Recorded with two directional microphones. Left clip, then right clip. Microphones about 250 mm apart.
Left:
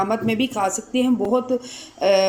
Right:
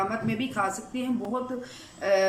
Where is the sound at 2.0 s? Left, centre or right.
Left.